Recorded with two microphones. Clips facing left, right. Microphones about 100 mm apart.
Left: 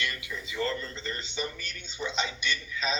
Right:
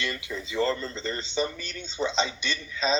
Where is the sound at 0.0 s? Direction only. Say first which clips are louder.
Right 3 dB; 25° right (ahead or behind).